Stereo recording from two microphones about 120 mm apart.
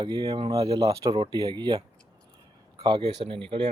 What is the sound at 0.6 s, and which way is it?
Speech, 35° right (ahead or behind).